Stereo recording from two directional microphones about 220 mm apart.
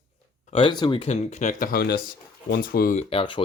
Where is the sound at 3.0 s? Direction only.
25° left (ahead or behind).